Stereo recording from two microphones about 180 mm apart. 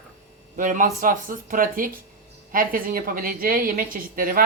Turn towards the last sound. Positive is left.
turn(degrees=-50)  # may be behind; listen again after turning